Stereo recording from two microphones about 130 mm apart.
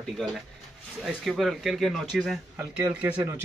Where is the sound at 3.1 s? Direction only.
20° right (ahead or behind).